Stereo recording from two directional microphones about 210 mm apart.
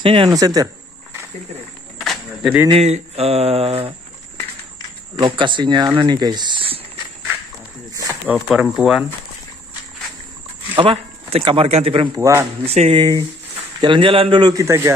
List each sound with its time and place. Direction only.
0.0 s speech: 25° right (ahead or behind)
2.0 s a sound: centre (ahead or behind)
2.7 s speech: 30° right (ahead or behind)
5.2 s speech: 25° right (ahead or behind)
7.9 s a sound: 15° right (ahead or behind)
8.5 s speech: centre (ahead or behind)
10.8 s a man's voice: 25° right (ahead or behind)
12.2 s speech: 15° right (ahead or behind)
12.6 s speech: 30° right (ahead or behind)